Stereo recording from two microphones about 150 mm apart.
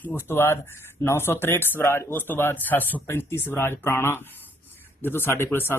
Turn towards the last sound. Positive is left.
turn(degrees=15)  # may be behind; listen again after turning